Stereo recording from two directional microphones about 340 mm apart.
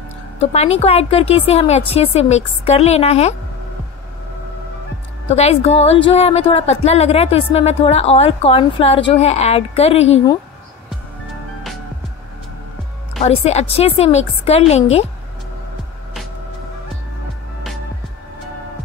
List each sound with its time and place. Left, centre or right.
0.4 s a woman's voice: centre
5.3 s a woman's voice: centre
13.2 s a woman's voice: centre